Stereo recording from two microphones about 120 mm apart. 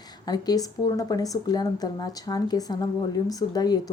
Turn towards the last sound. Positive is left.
turn(degrees=35)  # may be behind; listen again after turning